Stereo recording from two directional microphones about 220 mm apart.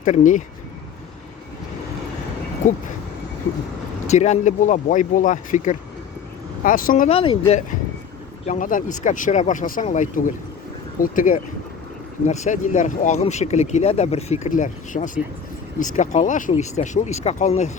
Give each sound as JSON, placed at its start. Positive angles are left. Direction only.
{"t": 0.0, "sound": "speech", "side_deg": 35}
{"t": 2.6, "sound": "speech", "side_deg": 35}
{"t": 4.0, "sound": "speech", "side_deg": 30}
{"t": 7.2, "sound": "speech", "side_deg": 25}
{"t": 8.4, "sound": "speech", "side_deg": 35}